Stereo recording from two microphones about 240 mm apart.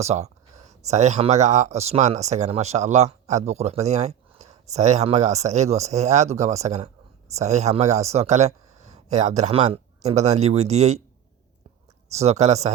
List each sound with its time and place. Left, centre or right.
0.0 s a sound: right
0.9 s speech: right
12.1 s speech: right